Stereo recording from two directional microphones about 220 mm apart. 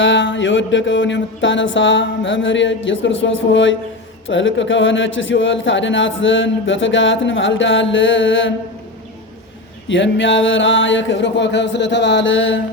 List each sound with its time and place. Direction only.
0.0 s a man's voice: 55° left (ahead or behind)
9.9 s a man's voice: 55° left (ahead or behind)